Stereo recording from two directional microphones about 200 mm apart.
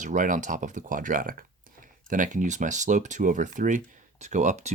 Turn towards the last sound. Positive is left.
turn(degrees=-35)  # may be behind; listen again after turning